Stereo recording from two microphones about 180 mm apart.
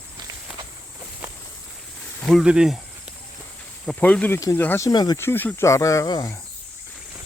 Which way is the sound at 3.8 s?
5° left (ahead or behind).